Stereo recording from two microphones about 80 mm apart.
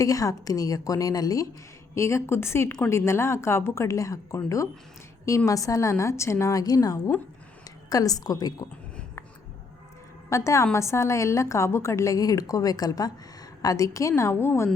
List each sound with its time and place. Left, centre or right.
0.0 s a woman's voice: left
2.0 s a woman's voice: left
10.2 s a woman's voice: left